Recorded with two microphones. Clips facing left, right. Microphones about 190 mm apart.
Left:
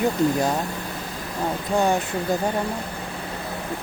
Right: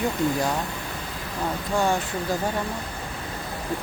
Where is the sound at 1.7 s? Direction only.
20° left (ahead or behind).